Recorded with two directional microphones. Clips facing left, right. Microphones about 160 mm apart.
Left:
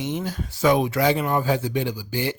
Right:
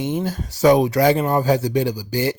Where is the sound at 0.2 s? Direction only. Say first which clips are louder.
Right 5 dB; 40° right (ahead or behind).